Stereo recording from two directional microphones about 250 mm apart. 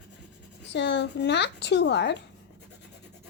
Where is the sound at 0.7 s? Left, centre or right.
Left.